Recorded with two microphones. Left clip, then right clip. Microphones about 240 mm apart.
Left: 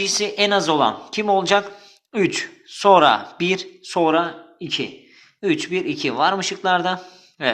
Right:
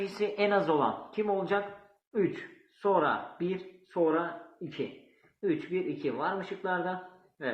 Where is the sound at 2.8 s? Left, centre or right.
Left.